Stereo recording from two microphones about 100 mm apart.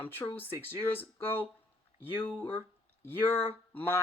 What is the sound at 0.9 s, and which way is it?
Speech, 20° left (ahead or behind).